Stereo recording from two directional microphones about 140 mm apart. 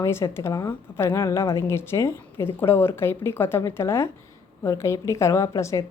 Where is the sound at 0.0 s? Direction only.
20° left (ahead or behind).